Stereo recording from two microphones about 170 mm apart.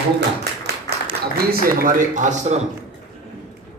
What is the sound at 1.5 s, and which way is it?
Speech, 55° right (ahead or behind).